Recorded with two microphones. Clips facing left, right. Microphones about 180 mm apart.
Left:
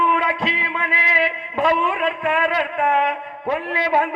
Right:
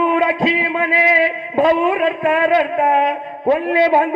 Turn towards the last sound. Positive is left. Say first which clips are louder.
# right 6 dB
turn(degrees=-35)  # may be behind; listen again after turning